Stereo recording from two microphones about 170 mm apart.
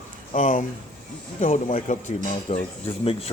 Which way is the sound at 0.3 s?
50° left (ahead or behind).